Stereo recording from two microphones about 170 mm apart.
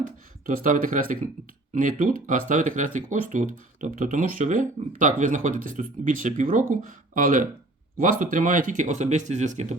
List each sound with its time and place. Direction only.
0.4 s speech: 50° right (ahead or behind)